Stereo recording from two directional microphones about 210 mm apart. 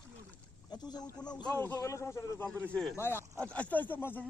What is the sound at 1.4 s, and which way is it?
A man's voice, 15° left (ahead or behind).